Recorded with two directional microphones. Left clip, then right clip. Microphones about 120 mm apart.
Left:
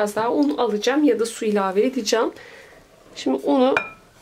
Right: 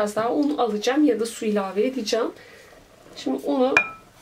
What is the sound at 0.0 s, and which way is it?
Speech, 30° left (ahead or behind).